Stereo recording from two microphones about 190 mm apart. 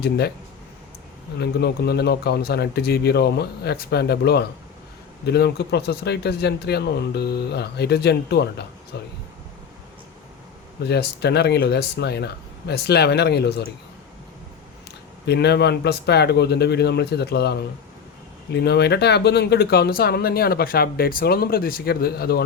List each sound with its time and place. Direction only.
1.4 s speech: 60° left (ahead or behind)
10.8 s speech: 60° left (ahead or behind)
15.3 s speech: 60° left (ahead or behind)